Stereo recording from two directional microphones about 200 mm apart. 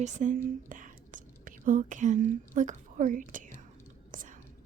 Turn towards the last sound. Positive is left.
turn(degrees=-40)  # may be behind; listen again after turning